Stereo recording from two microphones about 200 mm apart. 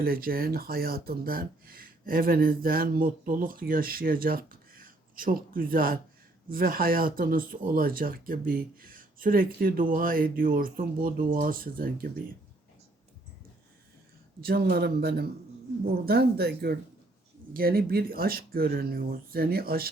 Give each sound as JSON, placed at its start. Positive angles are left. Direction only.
{"t": 0.0, "sound": "speech", "side_deg": -45}
{"t": 14.4, "sound": "speech", "side_deg": -50}